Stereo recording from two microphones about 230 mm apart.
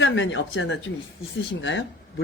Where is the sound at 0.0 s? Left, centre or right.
Left.